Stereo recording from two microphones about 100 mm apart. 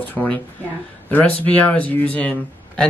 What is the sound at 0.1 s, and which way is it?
Speech, 15° left (ahead or behind).